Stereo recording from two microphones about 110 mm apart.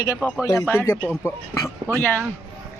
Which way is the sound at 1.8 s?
25° right (ahead or behind).